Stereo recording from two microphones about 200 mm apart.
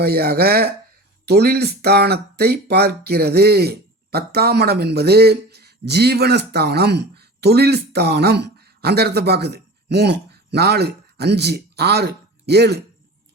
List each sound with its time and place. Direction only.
0.0 s speech: 50° right (ahead or behind)